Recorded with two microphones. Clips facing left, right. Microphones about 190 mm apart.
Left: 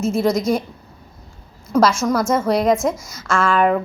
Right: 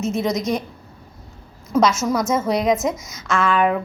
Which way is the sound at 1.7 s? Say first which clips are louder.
Left 2 dB; 5° right (ahead or behind).